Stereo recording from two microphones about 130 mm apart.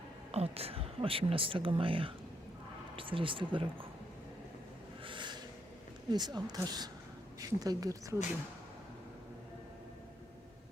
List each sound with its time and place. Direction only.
0.3 s speech: 50° right (ahead or behind)
5.0 s a sound: 35° right (ahead or behind)
6.1 s speech: 35° right (ahead or behind)